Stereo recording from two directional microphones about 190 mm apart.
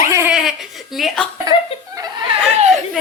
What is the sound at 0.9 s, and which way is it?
Speech, centre (ahead or behind).